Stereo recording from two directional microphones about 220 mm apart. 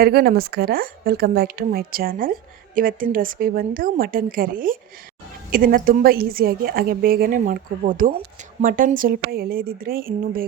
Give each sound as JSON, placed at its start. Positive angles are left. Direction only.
{"t": 0.0, "sound": "a woman's voice", "side_deg": -45}